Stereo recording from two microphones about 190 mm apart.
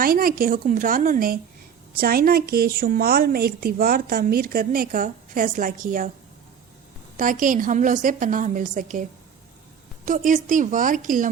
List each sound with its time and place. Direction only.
0.0 s a woman's voice: 50° right (ahead or behind)
7.2 s a woman's voice: 45° right (ahead or behind)
10.1 s a woman's voice: 45° right (ahead or behind)